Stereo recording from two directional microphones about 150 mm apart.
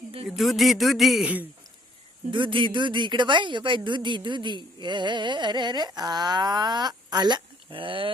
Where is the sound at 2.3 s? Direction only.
35° right (ahead or behind).